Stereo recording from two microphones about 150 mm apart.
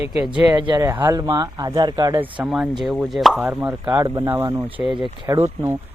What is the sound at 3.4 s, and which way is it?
Speech, 10° right (ahead or behind).